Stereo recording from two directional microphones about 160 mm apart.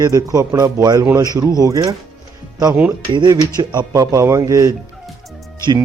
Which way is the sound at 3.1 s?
25° right (ahead or behind).